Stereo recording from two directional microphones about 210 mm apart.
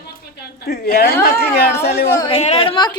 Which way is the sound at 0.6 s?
50° left (ahead or behind).